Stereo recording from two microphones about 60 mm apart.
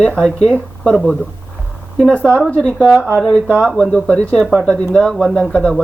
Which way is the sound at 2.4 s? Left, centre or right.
Left.